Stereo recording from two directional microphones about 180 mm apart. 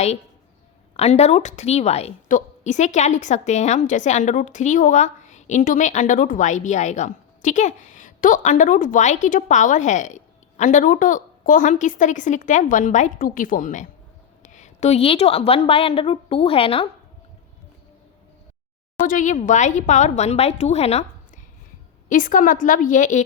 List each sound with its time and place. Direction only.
0.9 s a woman's voice: 35° left (ahead or behind)
19.0 s a woman's voice: 45° left (ahead or behind)
22.1 s a woman's voice: 50° left (ahead or behind)